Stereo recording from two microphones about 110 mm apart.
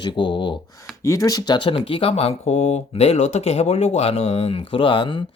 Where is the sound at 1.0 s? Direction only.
30° left (ahead or behind); by 5.0 s 55° left (ahead or behind).